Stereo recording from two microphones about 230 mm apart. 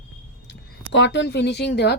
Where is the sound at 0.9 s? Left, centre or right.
Left.